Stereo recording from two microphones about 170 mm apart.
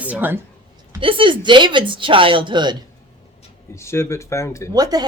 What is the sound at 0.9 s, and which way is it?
Speech, 30° right (ahead or behind).